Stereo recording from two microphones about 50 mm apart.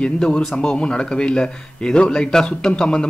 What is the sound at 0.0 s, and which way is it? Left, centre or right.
A man's voice, left.